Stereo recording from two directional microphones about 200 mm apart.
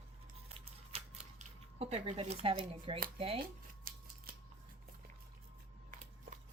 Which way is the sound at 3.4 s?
45° right (ahead or behind).